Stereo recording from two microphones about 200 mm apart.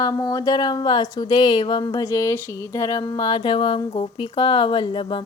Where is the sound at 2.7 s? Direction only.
15° left (ahead or behind).